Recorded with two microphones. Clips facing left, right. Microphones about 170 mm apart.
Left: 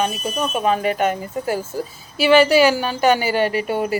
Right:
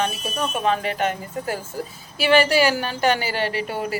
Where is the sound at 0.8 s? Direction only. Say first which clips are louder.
Left 4 dB; 45° left (ahead or behind).